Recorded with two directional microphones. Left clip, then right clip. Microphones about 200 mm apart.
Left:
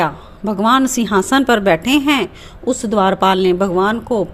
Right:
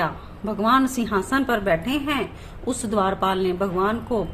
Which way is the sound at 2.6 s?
30° left (ahead or behind).